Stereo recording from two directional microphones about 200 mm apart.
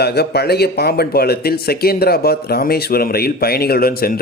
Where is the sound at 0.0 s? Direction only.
55° left (ahead or behind).